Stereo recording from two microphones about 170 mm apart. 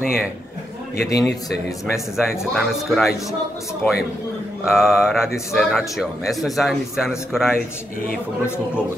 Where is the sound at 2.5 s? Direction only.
Centre (ahead or behind).